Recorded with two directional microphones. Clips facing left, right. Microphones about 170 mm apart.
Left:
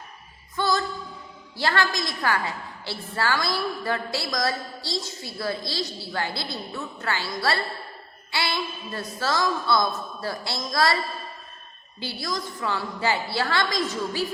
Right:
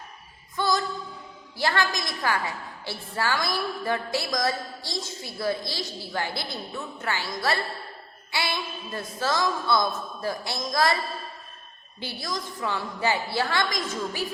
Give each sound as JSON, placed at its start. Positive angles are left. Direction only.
{"t": 0.5, "sound": "a sound", "side_deg": -15}
{"t": 1.5, "sound": "a woman's voice", "side_deg": -15}
{"t": 11.9, "sound": "a woman's voice", "side_deg": -20}